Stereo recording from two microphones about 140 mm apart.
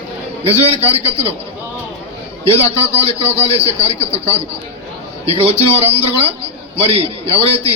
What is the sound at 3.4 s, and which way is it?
Speech, 45° right (ahead or behind).